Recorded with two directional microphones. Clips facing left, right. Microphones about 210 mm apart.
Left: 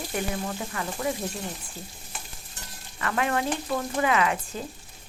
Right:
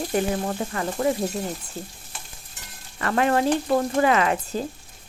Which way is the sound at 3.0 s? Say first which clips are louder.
Right 6 dB; 40° right (ahead or behind).